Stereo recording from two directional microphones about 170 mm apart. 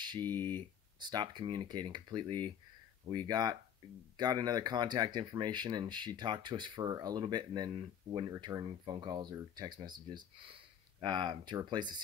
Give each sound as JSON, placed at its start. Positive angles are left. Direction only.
{"t": 0.2, "sound": "speech", "side_deg": 10}
{"t": 1.1, "sound": "speech", "side_deg": -25}